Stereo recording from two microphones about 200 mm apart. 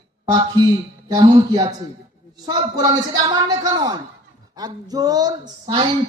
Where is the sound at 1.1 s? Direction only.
20° right (ahead or behind).